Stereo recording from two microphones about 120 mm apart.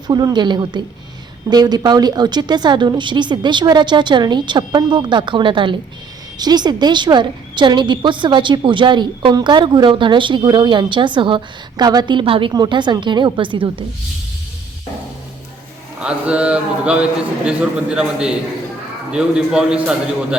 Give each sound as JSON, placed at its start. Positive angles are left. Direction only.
{"t": 0.1, "sound": "a woman's voice", "side_deg": -35}
{"t": 16.0, "sound": "a man's voice", "side_deg": -10}